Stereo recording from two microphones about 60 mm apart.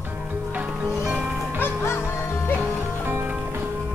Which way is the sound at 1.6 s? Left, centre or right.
Left.